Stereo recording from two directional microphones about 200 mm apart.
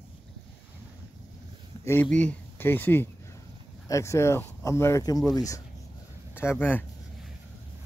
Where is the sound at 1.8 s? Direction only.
10° left (ahead or behind).